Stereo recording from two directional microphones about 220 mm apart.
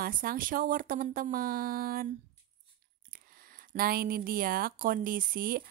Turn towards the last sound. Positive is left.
turn(degrees=-40)  # may be behind; listen again after turning